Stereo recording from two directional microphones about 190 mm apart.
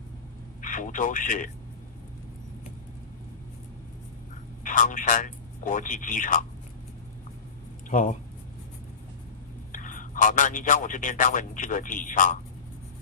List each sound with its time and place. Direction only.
0.6 s speech: 45° left (ahead or behind)
4.6 s speech: 40° left (ahead or behind)
7.9 s speech: 40° left (ahead or behind)
9.7 s a man's voice: 45° left (ahead or behind)